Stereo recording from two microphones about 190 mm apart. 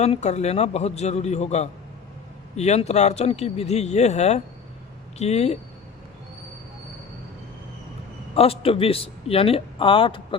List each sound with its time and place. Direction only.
0.0 s speech: 35° left (ahead or behind)
8.4 s a man's voice: 30° left (ahead or behind)